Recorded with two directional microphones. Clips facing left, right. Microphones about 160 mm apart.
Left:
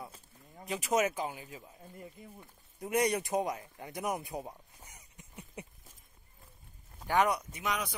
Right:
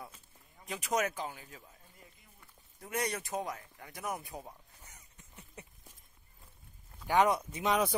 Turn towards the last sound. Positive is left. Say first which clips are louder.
# right 5 dB
turn(degrees=-30)  # may be behind; listen again after turning